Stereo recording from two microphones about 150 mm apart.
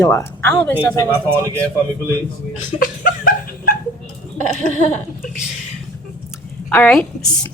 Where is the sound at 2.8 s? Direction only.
70° left (ahead or behind).